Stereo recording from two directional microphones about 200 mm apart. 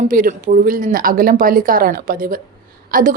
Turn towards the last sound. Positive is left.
turn(degrees=-45)  # may be behind; listen again after turning